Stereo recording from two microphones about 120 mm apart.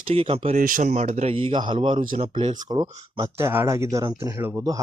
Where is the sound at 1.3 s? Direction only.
45° right (ahead or behind).